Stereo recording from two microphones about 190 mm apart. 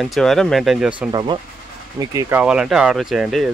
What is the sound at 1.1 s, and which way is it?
Speech, 25° right (ahead or behind).